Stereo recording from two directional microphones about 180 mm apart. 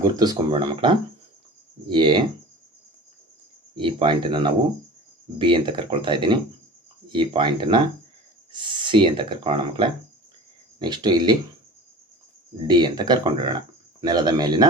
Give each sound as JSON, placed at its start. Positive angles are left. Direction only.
{"t": 0.0, "sound": "speech", "side_deg": -20}
{"t": 3.8, "sound": "speech", "side_deg": -25}
{"t": 12.6, "sound": "speech", "side_deg": -25}